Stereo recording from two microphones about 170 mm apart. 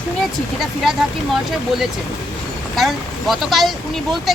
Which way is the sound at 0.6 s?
Centre (ahead or behind).